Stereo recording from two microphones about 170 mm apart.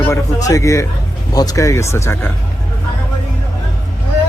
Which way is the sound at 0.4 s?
20° left (ahead or behind).